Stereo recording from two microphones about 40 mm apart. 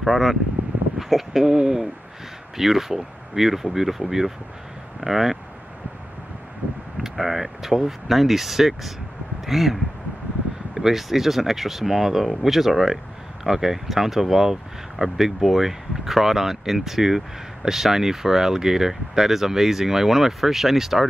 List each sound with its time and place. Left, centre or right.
0.0 s speech: centre
1.5 s speech: centre
2.5 s speech: centre
5.0 s speech: centre
7.0 s speech: centre